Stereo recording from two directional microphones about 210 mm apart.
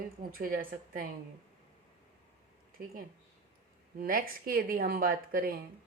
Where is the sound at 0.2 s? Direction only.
45° right (ahead or behind).